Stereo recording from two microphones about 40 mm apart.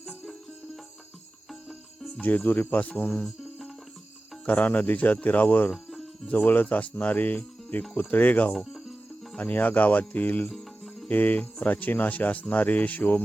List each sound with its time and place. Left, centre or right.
2.0 s cricket: centre
2.2 s speech: left
3.2 s cricket: centre
4.4 s speech: left
5.7 s cricket: centre
6.4 s speech: left